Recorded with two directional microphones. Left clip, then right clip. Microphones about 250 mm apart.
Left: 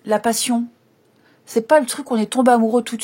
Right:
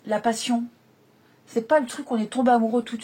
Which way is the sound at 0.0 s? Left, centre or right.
Left.